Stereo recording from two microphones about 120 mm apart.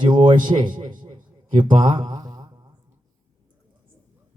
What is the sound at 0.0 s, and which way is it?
Speech, 40° right (ahead or behind).